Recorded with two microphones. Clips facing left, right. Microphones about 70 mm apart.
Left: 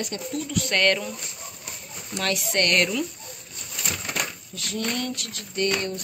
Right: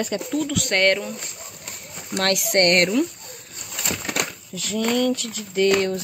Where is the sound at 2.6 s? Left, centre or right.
Right.